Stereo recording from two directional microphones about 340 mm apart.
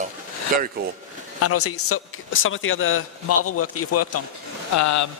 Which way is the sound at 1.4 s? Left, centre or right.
Left.